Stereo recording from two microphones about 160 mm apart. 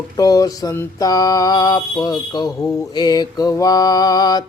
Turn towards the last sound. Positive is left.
turn(degrees=25)  # may be behind; listen again after turning